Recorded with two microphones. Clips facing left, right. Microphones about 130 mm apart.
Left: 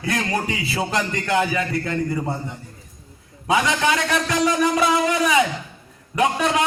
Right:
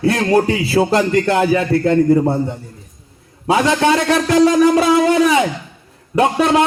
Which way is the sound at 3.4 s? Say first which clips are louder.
Right 6 dB; 35° right (ahead or behind).